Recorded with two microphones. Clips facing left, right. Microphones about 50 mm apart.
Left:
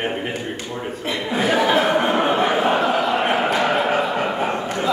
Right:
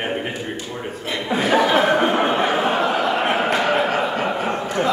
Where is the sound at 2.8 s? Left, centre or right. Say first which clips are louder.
Even; centre.